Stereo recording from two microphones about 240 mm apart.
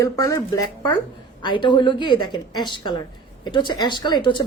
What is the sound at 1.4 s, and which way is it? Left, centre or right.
A woman's voice, centre.